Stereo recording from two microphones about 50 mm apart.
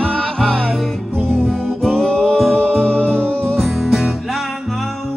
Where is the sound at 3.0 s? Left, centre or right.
Left.